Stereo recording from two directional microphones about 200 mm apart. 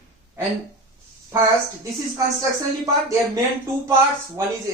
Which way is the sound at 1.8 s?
15° right (ahead or behind).